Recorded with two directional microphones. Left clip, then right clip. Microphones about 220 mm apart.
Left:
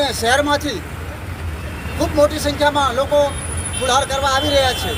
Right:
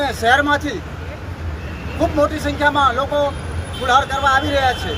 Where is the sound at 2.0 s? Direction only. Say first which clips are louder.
Left 2 dB; 5° right (ahead or behind).